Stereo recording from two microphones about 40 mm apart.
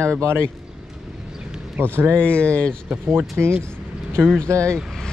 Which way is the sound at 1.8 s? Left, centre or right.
Right.